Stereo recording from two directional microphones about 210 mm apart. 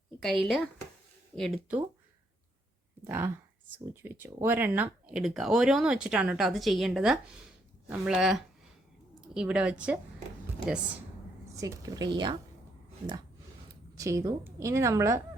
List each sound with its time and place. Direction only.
0.2 s speech: centre (ahead or behind)
3.0 s speech: 10° right (ahead or behind)
11.5 s a woman's voice: 15° right (ahead or behind)
14.0 s a woman's voice: 15° right (ahead or behind)